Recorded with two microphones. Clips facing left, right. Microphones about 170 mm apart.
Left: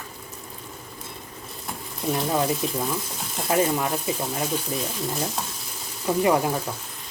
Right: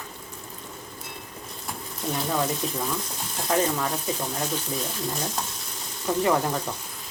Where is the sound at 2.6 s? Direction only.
10° left (ahead or behind).